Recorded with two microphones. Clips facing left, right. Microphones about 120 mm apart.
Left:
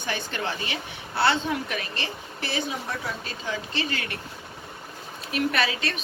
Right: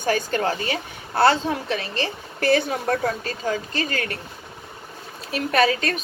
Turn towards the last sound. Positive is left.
turn(degrees=-40)  # may be behind; listen again after turning